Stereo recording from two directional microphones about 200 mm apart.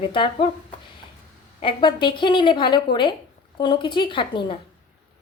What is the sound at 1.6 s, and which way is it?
Speech, 25° left (ahead or behind).